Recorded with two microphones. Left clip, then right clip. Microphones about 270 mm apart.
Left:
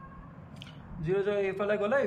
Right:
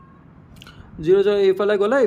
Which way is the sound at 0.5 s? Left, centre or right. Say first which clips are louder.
Right 9 dB; right.